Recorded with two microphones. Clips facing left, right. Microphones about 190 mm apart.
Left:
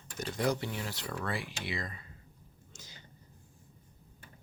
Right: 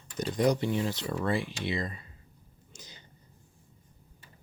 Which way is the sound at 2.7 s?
20° right (ahead or behind).